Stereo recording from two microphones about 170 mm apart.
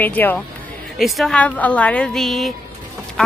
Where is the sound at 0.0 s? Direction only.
10° left (ahead or behind).